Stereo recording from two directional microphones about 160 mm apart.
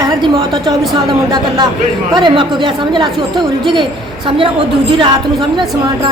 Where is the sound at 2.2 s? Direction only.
30° right (ahead or behind).